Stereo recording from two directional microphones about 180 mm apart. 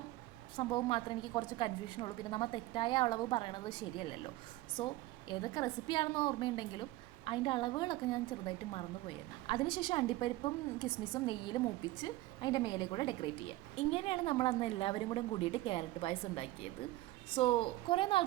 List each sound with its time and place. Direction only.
0.5 s a woman's voice: 25° left (ahead or behind)